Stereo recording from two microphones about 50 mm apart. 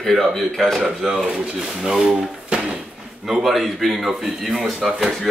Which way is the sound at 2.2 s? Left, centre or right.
Right.